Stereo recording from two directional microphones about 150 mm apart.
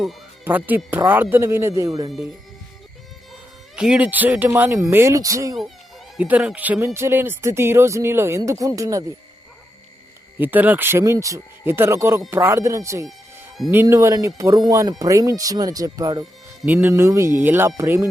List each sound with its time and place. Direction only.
0.4 s speech: 10° right (ahead or behind)
2.0 s speech: centre (ahead or behind)
3.8 s speech: 5° right (ahead or behind)
6.1 s speech: 10° right (ahead or behind)
10.3 s speech: 10° right (ahead or behind)
16.6 s speech: 15° right (ahead or behind)